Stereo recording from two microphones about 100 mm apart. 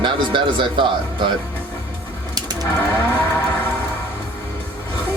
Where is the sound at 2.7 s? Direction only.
25° left (ahead or behind).